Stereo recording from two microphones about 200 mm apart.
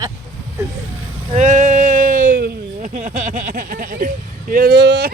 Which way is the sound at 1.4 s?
35° right (ahead or behind).